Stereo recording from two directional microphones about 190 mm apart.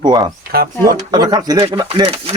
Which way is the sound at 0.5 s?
55° right (ahead or behind).